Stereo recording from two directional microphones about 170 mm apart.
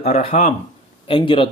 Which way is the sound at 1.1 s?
30° left (ahead or behind).